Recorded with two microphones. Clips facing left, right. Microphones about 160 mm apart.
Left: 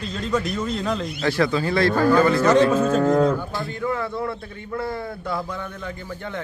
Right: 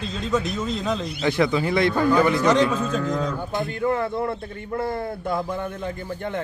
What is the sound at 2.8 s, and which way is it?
Speech, 55° left (ahead or behind).